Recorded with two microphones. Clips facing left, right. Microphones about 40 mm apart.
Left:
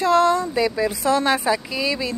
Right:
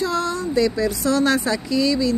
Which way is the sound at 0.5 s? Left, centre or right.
Left.